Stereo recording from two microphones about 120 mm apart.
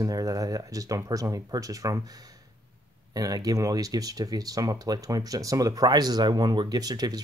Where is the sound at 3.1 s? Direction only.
30° right (ahead or behind).